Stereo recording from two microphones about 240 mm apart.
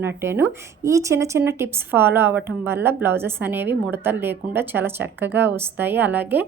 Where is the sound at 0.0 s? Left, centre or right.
Centre.